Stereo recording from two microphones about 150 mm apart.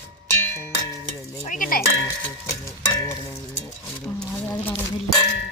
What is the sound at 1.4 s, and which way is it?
Speech, 60° left (ahead or behind).